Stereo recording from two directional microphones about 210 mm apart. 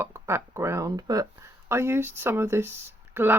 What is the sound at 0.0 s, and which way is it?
Speech, 10° right (ahead or behind).